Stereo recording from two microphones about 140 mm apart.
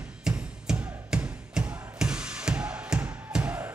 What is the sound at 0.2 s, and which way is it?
Music, 5° right (ahead or behind).